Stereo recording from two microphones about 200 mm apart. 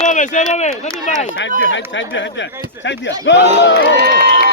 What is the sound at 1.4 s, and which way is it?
Speech, 70° left (ahead or behind).